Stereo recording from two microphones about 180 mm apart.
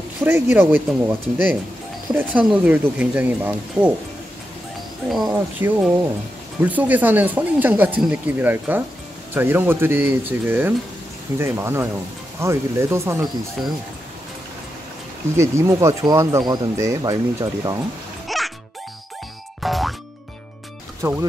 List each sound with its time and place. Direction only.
0.2 s speech: 10° right (ahead or behind)
5.1 s speech: 5° right (ahead or behind)
15.3 s speech: 15° right (ahead or behind)
18.3 s music: centre (ahead or behind)
19.6 s music: centre (ahead or behind)
21.0 s speech: 15° right (ahead or behind)